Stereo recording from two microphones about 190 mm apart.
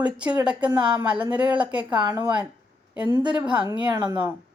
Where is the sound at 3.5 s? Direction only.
25° right (ahead or behind).